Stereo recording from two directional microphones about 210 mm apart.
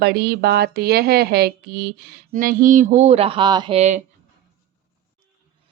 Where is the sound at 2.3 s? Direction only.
40° right (ahead or behind); by 3.8 s 20° right (ahead or behind).